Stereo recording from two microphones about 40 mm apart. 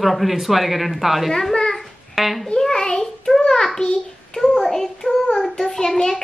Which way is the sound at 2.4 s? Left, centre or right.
Centre.